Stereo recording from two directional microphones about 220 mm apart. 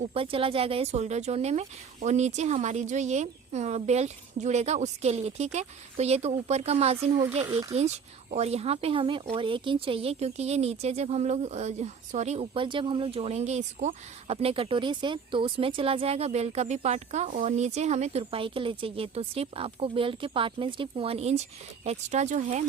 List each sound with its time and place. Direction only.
0.0 s a woman's voice: 25° right (ahead or behind)
7.4 s speech: 15° right (ahead or behind)
7.7 s a woman's voice: 30° right (ahead or behind)